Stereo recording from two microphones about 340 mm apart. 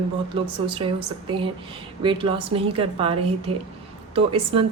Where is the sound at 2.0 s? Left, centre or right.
Centre.